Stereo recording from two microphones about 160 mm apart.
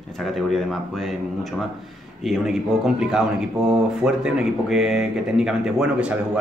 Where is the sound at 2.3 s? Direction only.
Centre (ahead or behind).